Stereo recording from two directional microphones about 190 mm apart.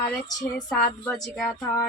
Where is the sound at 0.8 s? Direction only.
5° left (ahead or behind).